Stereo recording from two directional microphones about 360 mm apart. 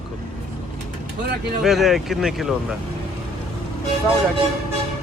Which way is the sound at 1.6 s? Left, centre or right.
Centre.